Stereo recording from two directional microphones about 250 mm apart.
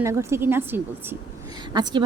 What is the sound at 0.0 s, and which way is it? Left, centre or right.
A woman's voice, centre.